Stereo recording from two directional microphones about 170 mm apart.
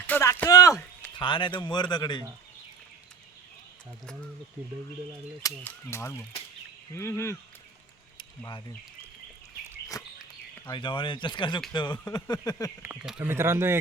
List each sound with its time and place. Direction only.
0.1 s a sound: 15° left (ahead or behind)
1.1 s speech: 30° left (ahead or behind)
4.0 s speech: 5° left (ahead or behind)
5.6 s speech: 15° left (ahead or behind)
10.0 s a sound: 20° left (ahead or behind)
10.7 s speech: 30° left (ahead or behind)
12.8 s speech: 15° right (ahead or behind)